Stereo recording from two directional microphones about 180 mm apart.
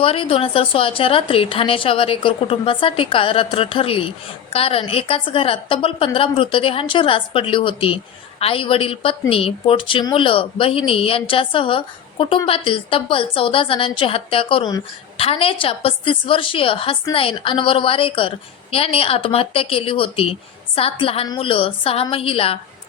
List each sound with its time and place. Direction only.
0.0 s a woman's voice: 30° left (ahead or behind)